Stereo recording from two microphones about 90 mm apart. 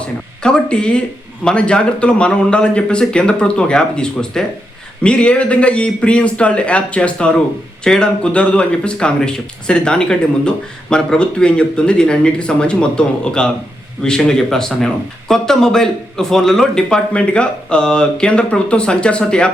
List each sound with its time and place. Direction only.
0.4 s speech: 10° left (ahead or behind)